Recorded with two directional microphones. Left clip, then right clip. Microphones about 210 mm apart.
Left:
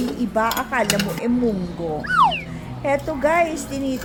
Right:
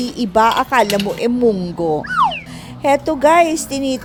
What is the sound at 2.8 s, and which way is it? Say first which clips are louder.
Speech: right 7 dB; 40° right (ahead or behind).